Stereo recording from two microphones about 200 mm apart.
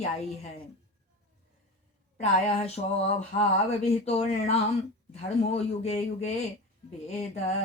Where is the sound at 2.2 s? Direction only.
30° left (ahead or behind).